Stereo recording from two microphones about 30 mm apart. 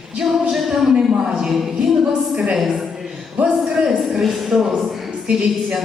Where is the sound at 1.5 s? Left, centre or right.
Centre.